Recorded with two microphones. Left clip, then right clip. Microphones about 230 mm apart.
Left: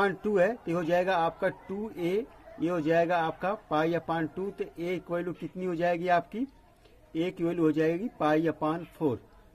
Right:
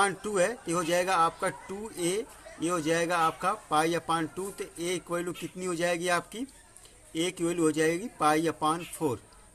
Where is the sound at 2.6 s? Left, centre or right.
Centre.